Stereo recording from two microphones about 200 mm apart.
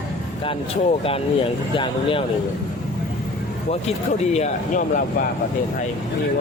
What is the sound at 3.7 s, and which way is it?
Speech, 30° left (ahead or behind).